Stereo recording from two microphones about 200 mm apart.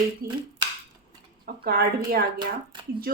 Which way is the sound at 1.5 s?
45° right (ahead or behind).